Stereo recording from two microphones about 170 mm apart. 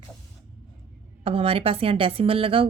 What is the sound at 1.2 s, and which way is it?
Speech, 35° right (ahead or behind).